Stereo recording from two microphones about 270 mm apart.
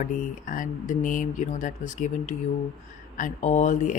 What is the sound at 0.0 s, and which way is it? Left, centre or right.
Speech, left.